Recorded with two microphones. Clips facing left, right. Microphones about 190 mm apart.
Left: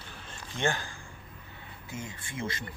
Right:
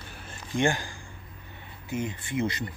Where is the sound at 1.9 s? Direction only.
20° right (ahead or behind).